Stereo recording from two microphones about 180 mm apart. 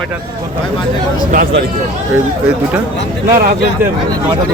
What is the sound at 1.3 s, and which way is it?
Speech, 50° right (ahead or behind).